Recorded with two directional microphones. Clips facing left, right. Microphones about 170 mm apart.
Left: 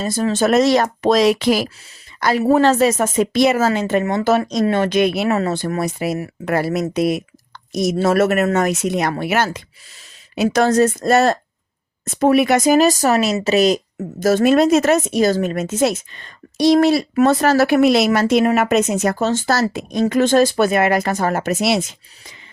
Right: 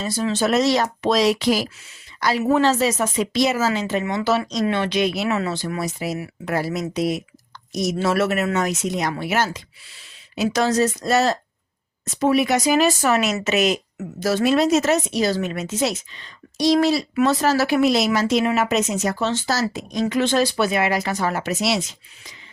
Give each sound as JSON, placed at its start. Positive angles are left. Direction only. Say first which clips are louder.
{"t": 0.0, "sound": "a woman's voice", "louder": "left 4 dB", "side_deg": 50}
{"t": 5.3, "sound": "a woman's voice", "louder": "left 5 dB", "side_deg": 45}